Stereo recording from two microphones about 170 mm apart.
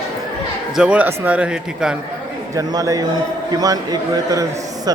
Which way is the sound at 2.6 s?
20° right (ahead or behind).